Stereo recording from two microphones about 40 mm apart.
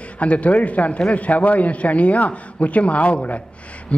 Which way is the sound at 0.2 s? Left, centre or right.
Left.